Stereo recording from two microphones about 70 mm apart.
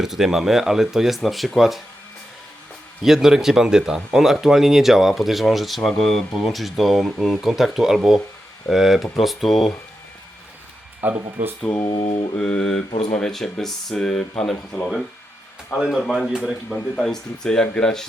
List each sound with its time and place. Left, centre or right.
0.0 s speech: centre
3.0 s speech: centre
11.0 s speech: right
11.7 s a sound: left
12.4 s speech: centre
14.5 s speech: left
15.9 s speech: centre
16.3 s speech: centre
16.6 s speech: centre